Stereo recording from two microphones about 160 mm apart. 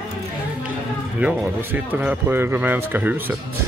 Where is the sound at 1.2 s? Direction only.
10° right (ahead or behind).